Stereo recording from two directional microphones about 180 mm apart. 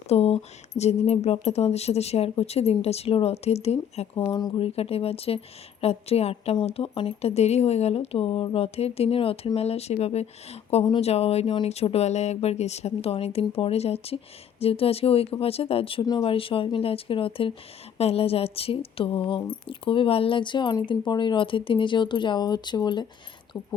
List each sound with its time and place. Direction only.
0.1 s speech: 35° left (ahead or behind)
4.2 s speech: 20° left (ahead or behind)